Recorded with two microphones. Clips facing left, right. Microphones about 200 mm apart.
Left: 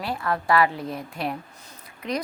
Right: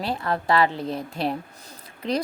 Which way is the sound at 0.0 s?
25° right (ahead or behind).